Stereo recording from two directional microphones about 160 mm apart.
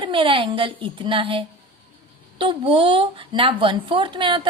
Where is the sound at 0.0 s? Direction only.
35° right (ahead or behind).